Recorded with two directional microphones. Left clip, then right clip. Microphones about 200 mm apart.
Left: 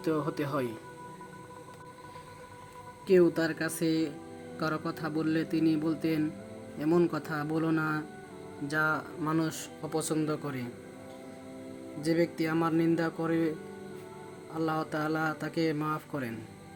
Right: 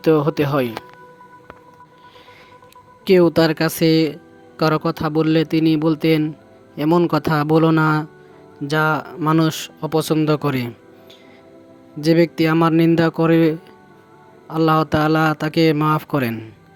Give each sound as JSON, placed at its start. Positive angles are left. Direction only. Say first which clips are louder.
{"t": 0.0, "sound": "speech", "louder": "right 15 dB", "side_deg": -45}
{"t": 3.0, "sound": "speech", "louder": "right 11 dB", "side_deg": -50}
{"t": 11.9, "sound": "speech", "louder": "right 13 dB", "side_deg": -45}
{"t": 14.5, "sound": "speech", "louder": "right 15 dB", "side_deg": -45}